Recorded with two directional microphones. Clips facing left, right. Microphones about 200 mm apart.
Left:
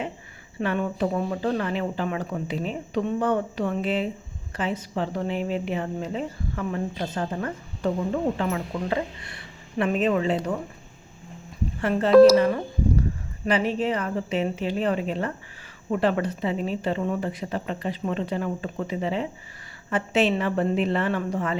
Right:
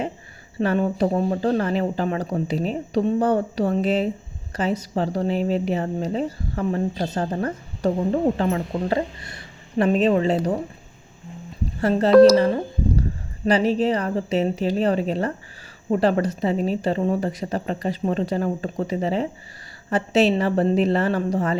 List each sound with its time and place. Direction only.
0.6 s a woman's voice: 35° right (ahead or behind)
11.8 s a woman's voice: 35° right (ahead or behind)
12.1 s speech: centre (ahead or behind)
12.4 s a woman's voice: 25° right (ahead or behind)